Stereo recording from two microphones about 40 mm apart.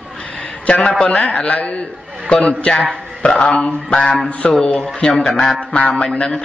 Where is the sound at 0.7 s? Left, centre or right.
Left.